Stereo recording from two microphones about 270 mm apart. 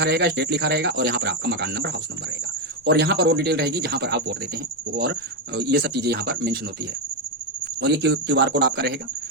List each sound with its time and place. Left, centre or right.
0.0 s speech: right
5.5 s speech: right
7.8 s speech: right